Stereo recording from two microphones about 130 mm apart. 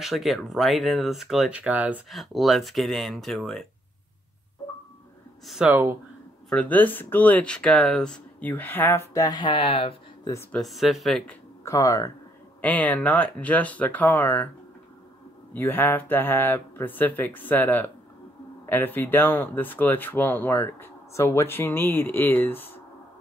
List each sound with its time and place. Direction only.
0.0 s speech: centre (ahead or behind)
2.0 s speech: centre (ahead or behind)
5.5 s speech: 5° right (ahead or behind)
6.5 s speech: 10° left (ahead or behind); by 9.9 s 45° left (ahead or behind)
10.5 s speech: centre (ahead or behind)
11.6 s speech: 25° left (ahead or behind)
12.6 s speech: 10° left (ahead or behind)
15.5 s speech: 15° left (ahead or behind)